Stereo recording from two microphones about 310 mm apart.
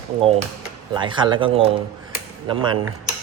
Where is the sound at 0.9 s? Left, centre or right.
Centre.